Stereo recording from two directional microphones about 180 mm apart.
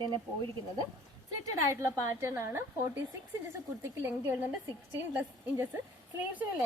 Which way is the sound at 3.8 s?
15° right (ahead or behind).